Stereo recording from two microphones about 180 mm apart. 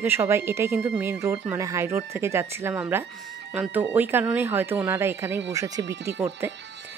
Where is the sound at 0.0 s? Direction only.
15° right (ahead or behind).